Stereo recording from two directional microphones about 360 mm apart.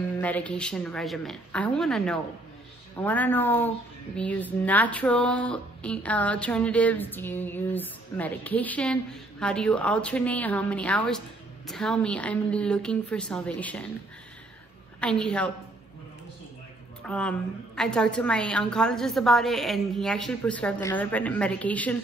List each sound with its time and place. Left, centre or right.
0.2 s a woman's voice: centre
15.0 s a woman's voice: centre
17.0 s a woman's voice: centre